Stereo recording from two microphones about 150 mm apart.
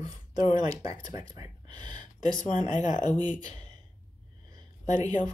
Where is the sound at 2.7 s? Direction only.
55° left (ahead or behind).